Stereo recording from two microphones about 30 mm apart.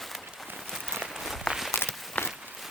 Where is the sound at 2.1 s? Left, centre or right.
Left.